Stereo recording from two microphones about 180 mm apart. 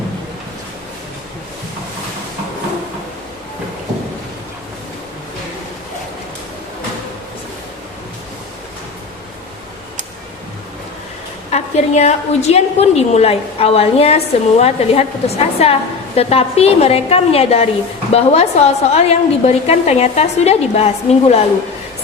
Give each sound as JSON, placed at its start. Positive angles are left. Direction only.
{"t": 11.5, "sound": "a woman's voice", "side_deg": 35}